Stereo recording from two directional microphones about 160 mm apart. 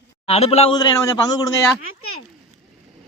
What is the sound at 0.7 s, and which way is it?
Speech, 25° left (ahead or behind).